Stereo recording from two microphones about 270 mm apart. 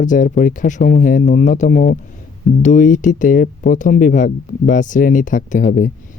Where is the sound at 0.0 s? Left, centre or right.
Left.